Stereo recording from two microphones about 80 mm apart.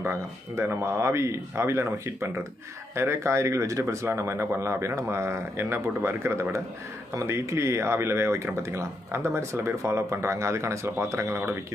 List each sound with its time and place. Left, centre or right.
0.0 s speech: right